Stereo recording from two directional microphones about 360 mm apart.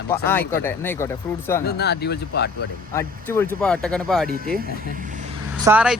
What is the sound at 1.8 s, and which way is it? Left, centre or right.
Speech, left.